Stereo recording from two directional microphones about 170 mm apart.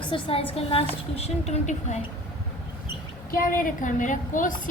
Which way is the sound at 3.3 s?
55° left (ahead or behind).